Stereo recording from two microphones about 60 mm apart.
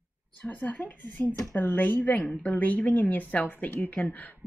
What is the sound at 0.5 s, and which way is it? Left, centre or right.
A woman's voice, left.